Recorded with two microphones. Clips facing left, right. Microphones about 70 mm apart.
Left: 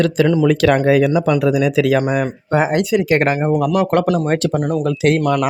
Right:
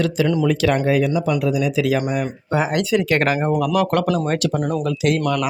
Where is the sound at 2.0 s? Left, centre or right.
Left.